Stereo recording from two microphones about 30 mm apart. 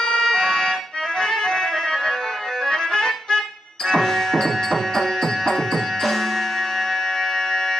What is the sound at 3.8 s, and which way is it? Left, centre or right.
Music, centre.